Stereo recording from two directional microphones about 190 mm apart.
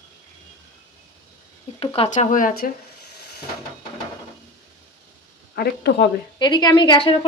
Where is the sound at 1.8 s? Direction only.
30° left (ahead or behind).